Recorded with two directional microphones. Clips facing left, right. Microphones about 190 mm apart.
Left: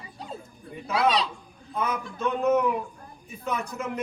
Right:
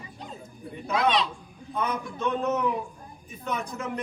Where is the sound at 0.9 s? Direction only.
35° left (ahead or behind).